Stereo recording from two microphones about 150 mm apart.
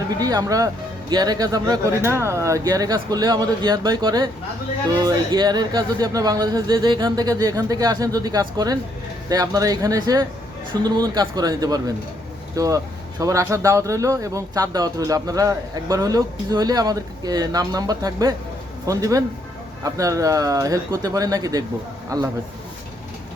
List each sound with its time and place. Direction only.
0.2 s a man's voice: 25° right (ahead or behind)